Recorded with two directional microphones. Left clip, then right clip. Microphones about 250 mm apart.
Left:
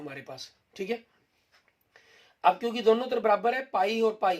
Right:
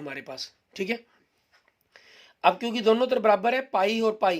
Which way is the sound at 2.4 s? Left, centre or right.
Right.